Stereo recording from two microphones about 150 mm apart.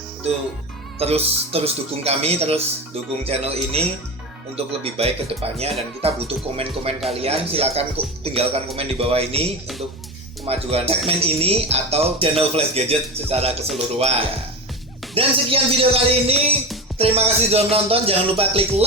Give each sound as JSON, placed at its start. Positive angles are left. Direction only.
{"t": 0.9, "sound": "speech", "side_deg": -45}
{"t": 4.5, "sound": "music", "side_deg": -40}
{"t": 10.4, "sound": "speech", "side_deg": -45}
{"t": 13.7, "sound": "music", "side_deg": -40}